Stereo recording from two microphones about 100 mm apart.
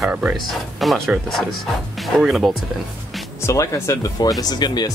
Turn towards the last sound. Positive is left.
turn(degrees=45)  # may be behind; listen again after turning